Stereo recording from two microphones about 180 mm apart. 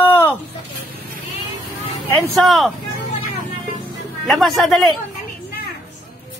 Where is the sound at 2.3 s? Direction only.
Centre (ahead or behind).